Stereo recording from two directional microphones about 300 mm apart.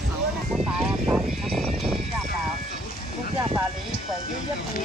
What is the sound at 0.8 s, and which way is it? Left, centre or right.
Speech, centre.